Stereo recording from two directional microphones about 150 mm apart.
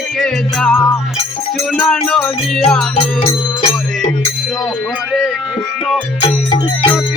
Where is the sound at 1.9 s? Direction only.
5° left (ahead or behind).